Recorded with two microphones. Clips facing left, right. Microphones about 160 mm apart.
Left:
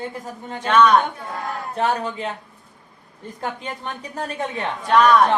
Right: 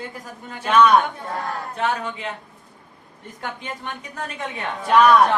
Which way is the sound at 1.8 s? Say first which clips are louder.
Left 3 dB; 35° left (ahead or behind).